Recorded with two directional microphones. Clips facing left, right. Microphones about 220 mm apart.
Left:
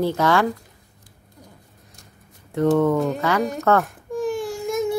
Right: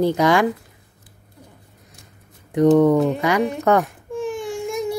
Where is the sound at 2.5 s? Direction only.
15° right (ahead or behind).